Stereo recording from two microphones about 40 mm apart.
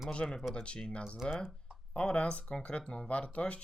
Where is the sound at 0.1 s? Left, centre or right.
Left.